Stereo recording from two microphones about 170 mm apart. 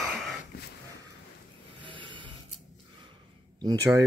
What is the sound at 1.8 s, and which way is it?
Snoring, 30° right (ahead or behind).